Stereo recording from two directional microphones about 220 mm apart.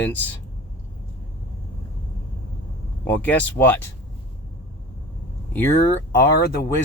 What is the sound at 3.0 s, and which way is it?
Speech, 5° left (ahead or behind).